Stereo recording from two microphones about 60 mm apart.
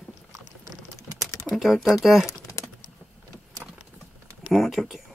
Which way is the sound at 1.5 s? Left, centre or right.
Centre.